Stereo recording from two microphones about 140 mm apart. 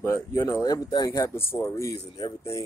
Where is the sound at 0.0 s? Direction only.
20° left (ahead or behind).